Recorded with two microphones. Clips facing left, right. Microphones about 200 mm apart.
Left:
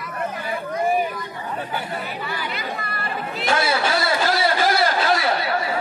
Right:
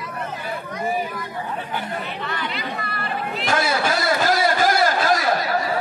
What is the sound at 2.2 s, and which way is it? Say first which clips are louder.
Speech: right 1 dB; 5° left (ahead or behind).